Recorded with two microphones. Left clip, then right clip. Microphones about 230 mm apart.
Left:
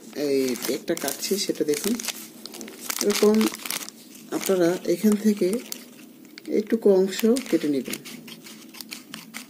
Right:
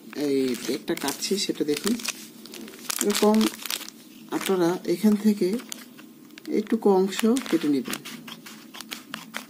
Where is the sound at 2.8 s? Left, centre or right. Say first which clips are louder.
Left 2 dB; centre.